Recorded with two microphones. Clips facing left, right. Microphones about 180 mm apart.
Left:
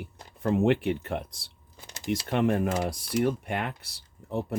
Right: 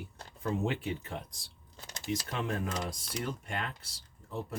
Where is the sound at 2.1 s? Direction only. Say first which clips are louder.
Left 9 dB; 65° left (ahead or behind).